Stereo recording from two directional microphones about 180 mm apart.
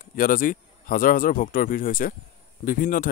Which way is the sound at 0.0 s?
50° left (ahead or behind).